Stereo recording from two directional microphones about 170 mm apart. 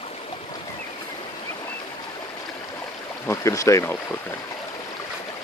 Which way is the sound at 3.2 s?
20° left (ahead or behind).